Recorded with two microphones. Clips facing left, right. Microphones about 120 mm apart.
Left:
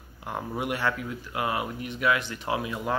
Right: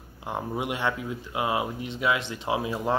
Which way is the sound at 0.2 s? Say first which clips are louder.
Right 1 dB; 20° right (ahead or behind).